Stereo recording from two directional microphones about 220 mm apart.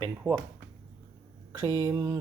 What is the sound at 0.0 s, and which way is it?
Speech, 15° right (ahead or behind).